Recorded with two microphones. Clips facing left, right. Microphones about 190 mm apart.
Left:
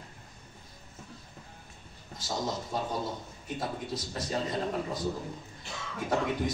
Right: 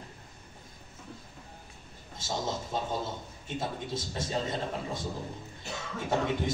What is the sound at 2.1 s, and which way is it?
A man's voice, 25° right (ahead or behind).